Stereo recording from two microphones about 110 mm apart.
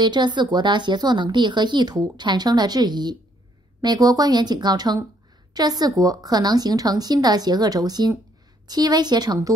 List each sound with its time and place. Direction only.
0.0 s speech: 40° right (ahead or behind)